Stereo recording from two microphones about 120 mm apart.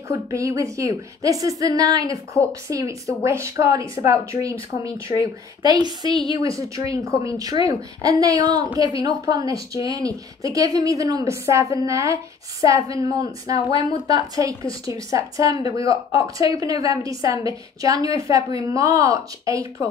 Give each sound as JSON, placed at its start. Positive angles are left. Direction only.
{"t": 0.3, "sound": "speech", "side_deg": -25}
{"t": 2.4, "sound": "a woman's voice", "side_deg": 10}
{"t": 2.7, "sound": "a woman's voice", "side_deg": -25}